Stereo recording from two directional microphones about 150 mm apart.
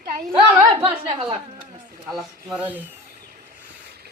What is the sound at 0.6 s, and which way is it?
Speech, 40° right (ahead or behind).